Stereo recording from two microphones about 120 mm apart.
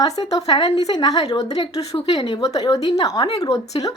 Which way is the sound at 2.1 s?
55° left (ahead or behind).